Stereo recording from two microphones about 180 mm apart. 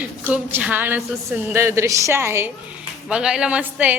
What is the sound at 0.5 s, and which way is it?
A woman's voice, 10° right (ahead or behind).